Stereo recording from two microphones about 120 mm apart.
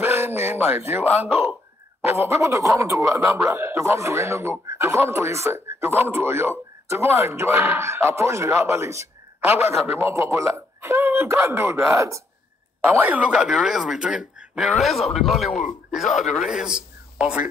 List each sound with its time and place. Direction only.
0.0 s a man's voice: 20° right (ahead or behind)